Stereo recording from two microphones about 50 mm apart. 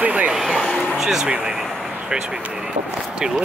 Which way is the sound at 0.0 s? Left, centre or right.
Right.